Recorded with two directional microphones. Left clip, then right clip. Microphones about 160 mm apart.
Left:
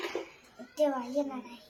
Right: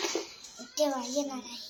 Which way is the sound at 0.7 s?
15° left (ahead or behind).